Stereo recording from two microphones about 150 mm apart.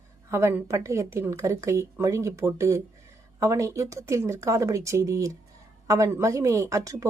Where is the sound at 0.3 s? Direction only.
20° right (ahead or behind).